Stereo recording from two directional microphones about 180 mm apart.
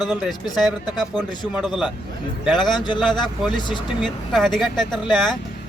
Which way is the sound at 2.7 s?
25° left (ahead or behind).